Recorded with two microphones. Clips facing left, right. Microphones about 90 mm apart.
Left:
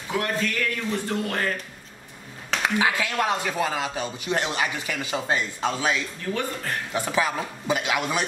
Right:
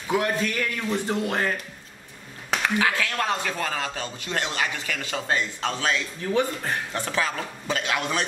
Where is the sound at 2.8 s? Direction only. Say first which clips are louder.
Left 1 dB; 15° left (ahead or behind).